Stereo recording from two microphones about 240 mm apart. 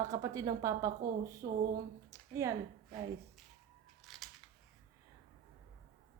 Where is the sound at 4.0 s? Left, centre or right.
Centre.